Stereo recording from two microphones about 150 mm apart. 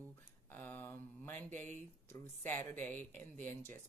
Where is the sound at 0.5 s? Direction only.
10° left (ahead or behind).